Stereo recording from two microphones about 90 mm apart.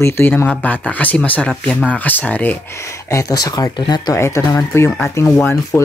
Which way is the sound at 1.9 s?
15° left (ahead or behind).